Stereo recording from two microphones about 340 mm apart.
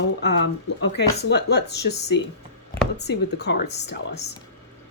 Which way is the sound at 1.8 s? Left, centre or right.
Left.